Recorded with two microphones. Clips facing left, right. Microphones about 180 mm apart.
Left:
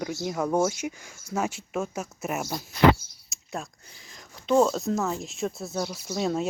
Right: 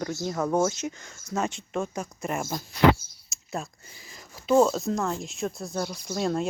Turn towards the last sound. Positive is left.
turn(degrees=0)  # may be behind; listen again after turning